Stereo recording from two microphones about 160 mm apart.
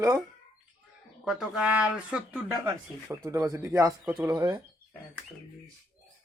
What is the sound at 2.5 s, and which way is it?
Speech, 20° right (ahead or behind).